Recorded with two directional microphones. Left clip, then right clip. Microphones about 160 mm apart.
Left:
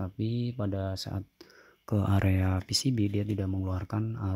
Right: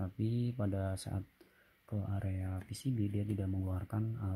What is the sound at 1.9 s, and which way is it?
Speech, 35° left (ahead or behind).